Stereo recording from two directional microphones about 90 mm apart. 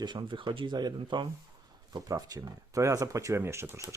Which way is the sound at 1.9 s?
40° right (ahead or behind).